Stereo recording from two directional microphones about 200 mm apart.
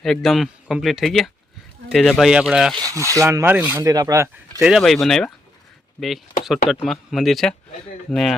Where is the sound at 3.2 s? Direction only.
15° right (ahead or behind).